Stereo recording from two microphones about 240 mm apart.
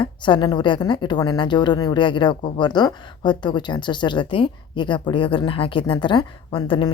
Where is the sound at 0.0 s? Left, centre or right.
Centre.